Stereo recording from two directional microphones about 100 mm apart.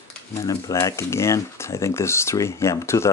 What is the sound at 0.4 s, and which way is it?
Speech, 35° left (ahead or behind).